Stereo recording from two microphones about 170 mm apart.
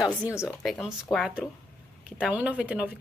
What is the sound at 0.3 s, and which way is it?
Speech, 15° left (ahead or behind).